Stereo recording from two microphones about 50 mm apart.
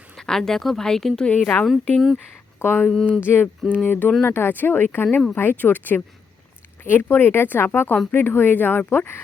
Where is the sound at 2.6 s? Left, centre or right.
Left.